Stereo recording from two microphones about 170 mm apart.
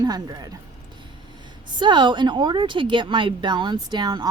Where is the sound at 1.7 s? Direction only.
25° right (ahead or behind).